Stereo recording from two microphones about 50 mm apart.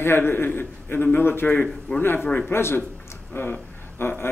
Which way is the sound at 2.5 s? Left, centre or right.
Left.